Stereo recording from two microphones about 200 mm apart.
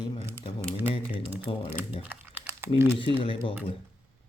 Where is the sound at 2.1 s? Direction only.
10° right (ahead or behind).